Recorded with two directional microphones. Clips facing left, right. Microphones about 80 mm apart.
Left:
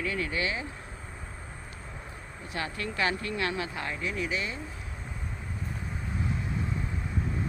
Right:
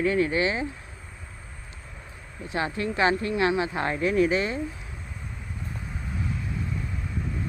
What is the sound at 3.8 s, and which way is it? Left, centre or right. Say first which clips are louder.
Speech: right 10 dB; right.